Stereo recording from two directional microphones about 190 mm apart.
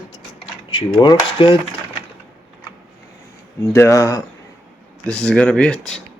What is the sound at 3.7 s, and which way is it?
Speech, 15° left (ahead or behind).